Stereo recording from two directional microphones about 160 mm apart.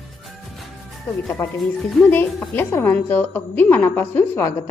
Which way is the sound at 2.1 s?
15° left (ahead or behind).